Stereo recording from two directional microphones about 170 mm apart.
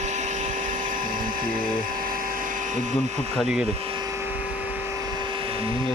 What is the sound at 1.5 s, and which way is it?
Speech, 55° right (ahead or behind).